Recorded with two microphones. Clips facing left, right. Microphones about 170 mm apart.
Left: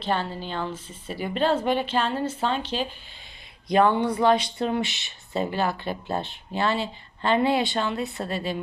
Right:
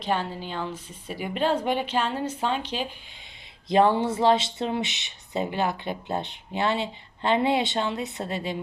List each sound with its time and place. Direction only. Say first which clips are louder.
0.0 s a woman's voice: even; 10° right (ahead or behind)
3.7 s speech: even; 25° right (ahead or behind)